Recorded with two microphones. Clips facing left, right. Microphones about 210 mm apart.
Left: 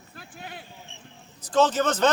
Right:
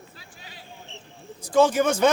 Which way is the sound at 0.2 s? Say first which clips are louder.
Left 6 dB; 55° left (ahead or behind).